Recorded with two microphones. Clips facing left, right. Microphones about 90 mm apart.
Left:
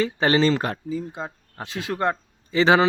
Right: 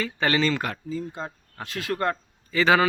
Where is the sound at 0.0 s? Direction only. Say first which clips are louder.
Left 4 dB; 30° left (ahead or behind).